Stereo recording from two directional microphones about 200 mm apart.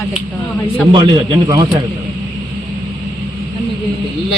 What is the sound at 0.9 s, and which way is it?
Speech, 20° right (ahead or behind).